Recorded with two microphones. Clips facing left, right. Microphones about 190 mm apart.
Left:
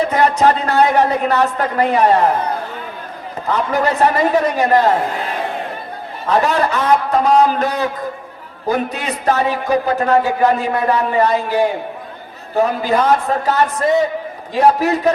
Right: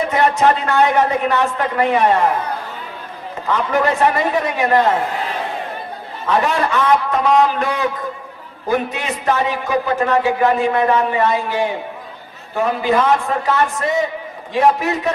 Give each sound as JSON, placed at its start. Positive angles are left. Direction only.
{"t": 0.1, "sound": "a man's voice", "side_deg": 40}
{"t": 3.5, "sound": "a man's voice", "side_deg": 40}
{"t": 6.2, "sound": "a man's voice", "side_deg": 40}